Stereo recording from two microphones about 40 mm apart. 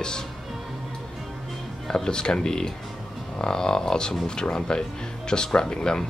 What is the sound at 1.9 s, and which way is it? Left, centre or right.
Speech, centre.